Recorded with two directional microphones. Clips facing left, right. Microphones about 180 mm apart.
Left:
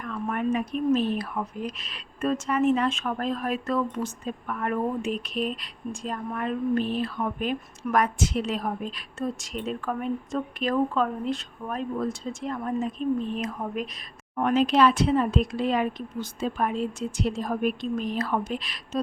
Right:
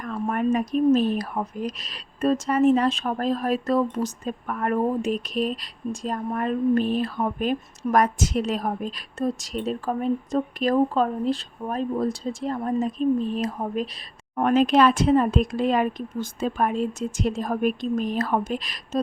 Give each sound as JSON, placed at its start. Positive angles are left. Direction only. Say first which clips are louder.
{"t": 0.0, "sound": "a woman's voice", "louder": "right 3 dB", "side_deg": -40}
{"t": 14.3, "sound": "speech", "louder": "right 3 dB", "side_deg": -50}